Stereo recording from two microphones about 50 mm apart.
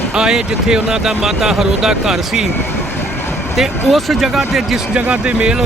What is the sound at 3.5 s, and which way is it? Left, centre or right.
Speech, centre.